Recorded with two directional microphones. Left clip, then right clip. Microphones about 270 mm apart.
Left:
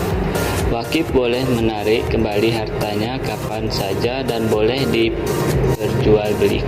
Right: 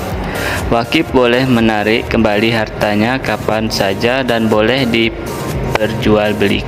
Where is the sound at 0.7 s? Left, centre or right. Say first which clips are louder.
Right 7 dB; right.